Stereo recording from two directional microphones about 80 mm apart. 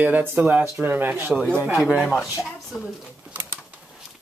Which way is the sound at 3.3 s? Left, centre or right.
Right.